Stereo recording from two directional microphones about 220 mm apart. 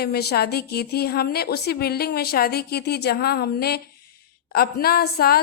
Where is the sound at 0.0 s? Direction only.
45° left (ahead or behind).